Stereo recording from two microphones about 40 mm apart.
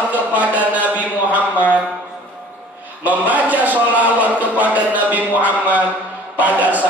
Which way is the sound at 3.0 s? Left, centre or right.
Right.